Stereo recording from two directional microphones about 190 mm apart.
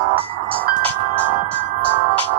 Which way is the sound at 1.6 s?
65° left (ahead or behind).